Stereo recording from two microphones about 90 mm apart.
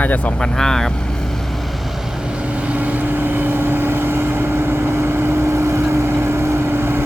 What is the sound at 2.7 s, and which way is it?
Vehicle, 15° right (ahead or behind).